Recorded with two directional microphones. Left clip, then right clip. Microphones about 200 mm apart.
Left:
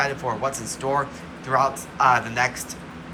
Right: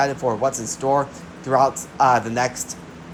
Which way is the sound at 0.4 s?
30° right (ahead or behind).